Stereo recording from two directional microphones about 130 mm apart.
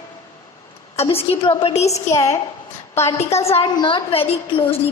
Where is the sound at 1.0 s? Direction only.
45° left (ahead or behind).